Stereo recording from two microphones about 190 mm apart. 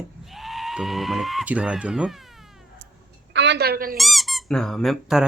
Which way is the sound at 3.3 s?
65° right (ahead or behind).